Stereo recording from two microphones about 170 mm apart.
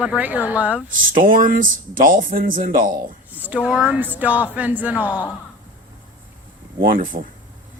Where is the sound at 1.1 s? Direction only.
50° right (ahead or behind).